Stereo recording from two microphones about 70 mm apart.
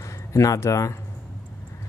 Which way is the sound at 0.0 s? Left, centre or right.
Left.